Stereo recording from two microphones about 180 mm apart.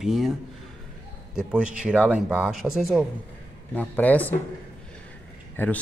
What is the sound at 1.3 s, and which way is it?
Speech, 5° right (ahead or behind).